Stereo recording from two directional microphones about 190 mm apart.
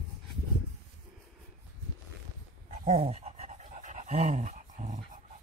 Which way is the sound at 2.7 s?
35° right (ahead or behind).